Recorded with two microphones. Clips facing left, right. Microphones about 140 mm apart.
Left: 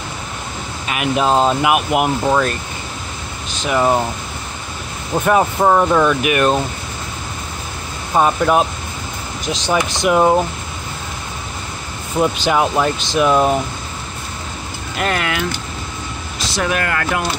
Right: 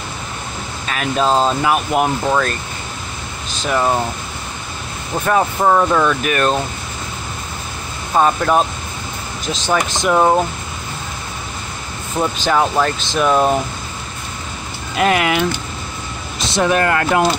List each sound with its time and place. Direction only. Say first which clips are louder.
0.8 s speech: left 1 dB; 15° left (ahead or behind)
3.6 s speech: left 1 dB; 10° left (ahead or behind)
5.1 s speech: left 2 dB; 10° left (ahead or behind)
8.1 s speech: even; 10° left (ahead or behind)
12.2 s speech: left 1 dB; 10° left (ahead or behind)
13.3 s speech: right 1 dB; 5° right (ahead or behind)
15.0 s speech: right 5 dB; 10° right (ahead or behind); by 17.2 s 25° right (ahead or behind)